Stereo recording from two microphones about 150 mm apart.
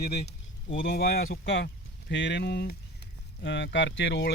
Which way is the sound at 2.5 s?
90° left.